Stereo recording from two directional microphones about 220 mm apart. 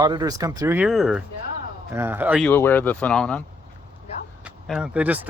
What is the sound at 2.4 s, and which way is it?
Speech, 10° left (ahead or behind).